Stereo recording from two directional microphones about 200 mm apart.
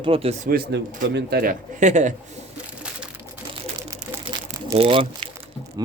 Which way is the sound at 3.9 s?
15° right (ahead or behind).